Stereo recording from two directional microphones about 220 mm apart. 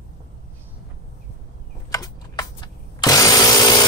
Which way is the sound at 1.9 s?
15° left (ahead or behind).